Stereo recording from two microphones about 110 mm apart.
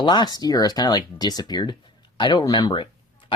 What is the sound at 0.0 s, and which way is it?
Speech, 45° left (ahead or behind).